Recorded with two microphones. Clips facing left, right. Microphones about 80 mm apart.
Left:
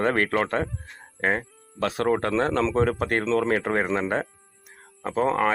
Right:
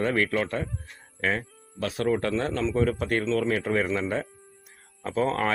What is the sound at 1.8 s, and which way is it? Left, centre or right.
Speech, left.